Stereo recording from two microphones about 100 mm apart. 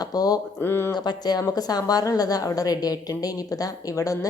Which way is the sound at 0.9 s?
45° left (ahead or behind).